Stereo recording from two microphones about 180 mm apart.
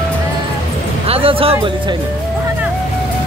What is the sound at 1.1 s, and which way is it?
Speech, 30° right (ahead or behind).